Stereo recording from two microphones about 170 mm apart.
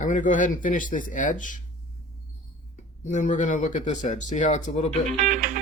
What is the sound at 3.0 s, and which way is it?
Speech, 45° left (ahead or behind).